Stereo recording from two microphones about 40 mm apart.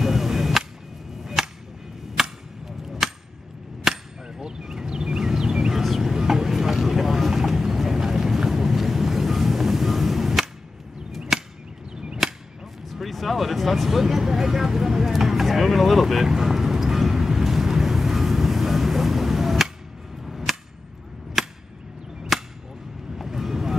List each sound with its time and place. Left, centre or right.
0.0 s music: centre
1.2 s whip: centre
2.2 s a sound: centre
5.8 s vehicle: centre
11.1 s chop: centre
11.9 s chop: right
12.9 s vehicle: centre
20.2 s a sound: centre
22.3 s whip: centre
23.1 s boat: centre